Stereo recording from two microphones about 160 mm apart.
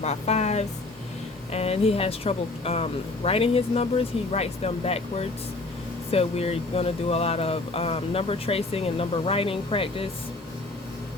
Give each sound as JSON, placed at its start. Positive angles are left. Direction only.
{"t": 0.0, "sound": "speech", "side_deg": 45}